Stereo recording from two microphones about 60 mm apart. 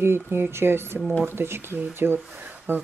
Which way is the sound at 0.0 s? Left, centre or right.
Right.